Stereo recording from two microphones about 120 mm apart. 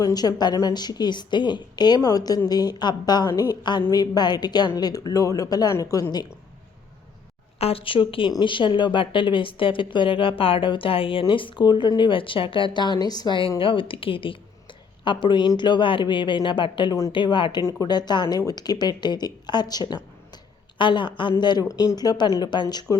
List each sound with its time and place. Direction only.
0.0 s a woman's voice: 30° left (ahead or behind)
7.6 s a woman's voice: 50° left (ahead or behind)
17.6 s a woman's voice: 30° left (ahead or behind)